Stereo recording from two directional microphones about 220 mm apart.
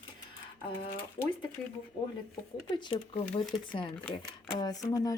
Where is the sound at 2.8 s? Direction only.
20° left (ahead or behind).